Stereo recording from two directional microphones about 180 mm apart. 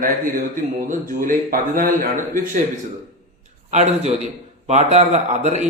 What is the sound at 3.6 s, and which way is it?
Speech, 40° right (ahead or behind).